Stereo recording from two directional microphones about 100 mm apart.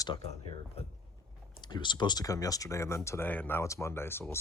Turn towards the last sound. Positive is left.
turn(degrees=25)  # may be behind; listen again after turning